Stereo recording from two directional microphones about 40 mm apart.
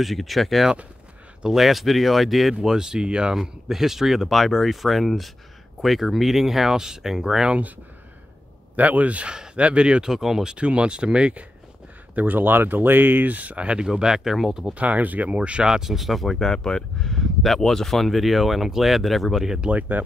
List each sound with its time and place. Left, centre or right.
0.0 s speech: centre
2.7 s speech: centre
3.3 s speech: centre
8.7 s speech: right
10.0 s speech: centre
10.5 s speech: right
12.2 s speech: right; by 14.6 s centre
14.7 s speech: right
15.3 s speech: right
15.6 s speech: centre
16.3 s speech: centre
19.7 s speech: right